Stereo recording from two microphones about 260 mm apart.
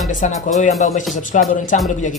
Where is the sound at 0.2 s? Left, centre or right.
Left.